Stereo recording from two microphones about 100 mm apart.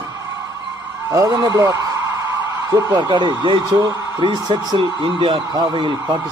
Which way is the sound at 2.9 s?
50° right (ahead or behind).